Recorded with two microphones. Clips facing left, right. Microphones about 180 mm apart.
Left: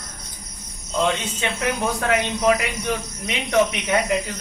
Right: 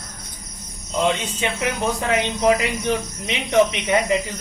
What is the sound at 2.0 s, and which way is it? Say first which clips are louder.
Speech: right 1 dB; 20° right (ahead or behind).